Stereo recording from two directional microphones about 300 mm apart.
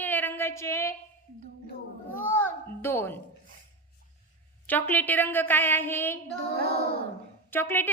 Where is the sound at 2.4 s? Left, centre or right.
Centre.